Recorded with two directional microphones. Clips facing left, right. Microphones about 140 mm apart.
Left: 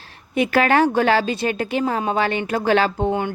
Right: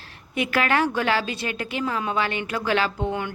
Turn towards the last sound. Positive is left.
turn(degrees=30)  # may be behind; listen again after turning